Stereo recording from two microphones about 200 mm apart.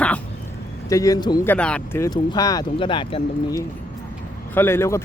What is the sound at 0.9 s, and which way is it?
Speech, 15° left (ahead or behind).